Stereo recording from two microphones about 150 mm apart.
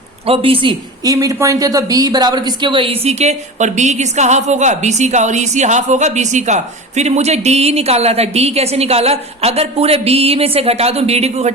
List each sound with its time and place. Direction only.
0.3 s speech: 35° right (ahead or behind)
1.1 s speech: 20° right (ahead or behind); by 11.5 s 45° right (ahead or behind)